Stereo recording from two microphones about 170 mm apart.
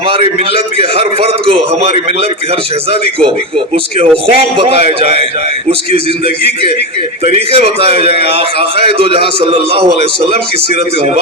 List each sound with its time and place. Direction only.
0.9 s a man's voice: 35° right (ahead or behind)
4.4 s a man's voice: 35° right (ahead or behind)